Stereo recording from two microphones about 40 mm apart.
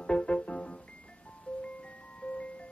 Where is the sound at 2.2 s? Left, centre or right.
Left.